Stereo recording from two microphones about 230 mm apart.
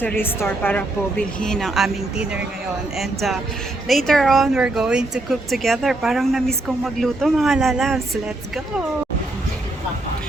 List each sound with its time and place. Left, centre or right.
0.0 s speech: centre